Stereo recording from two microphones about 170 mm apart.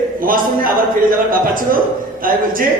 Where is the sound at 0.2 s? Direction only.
55° right (ahead or behind).